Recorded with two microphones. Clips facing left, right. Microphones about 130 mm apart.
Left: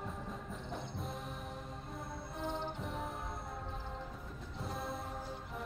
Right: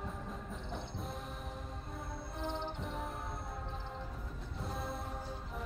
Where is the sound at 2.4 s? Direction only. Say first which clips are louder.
Even; centre (ahead or behind).